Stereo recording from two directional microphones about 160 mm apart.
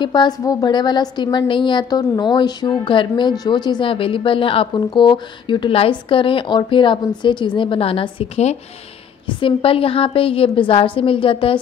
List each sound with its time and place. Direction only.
0.0 s a woman's voice: 25° left (ahead or behind)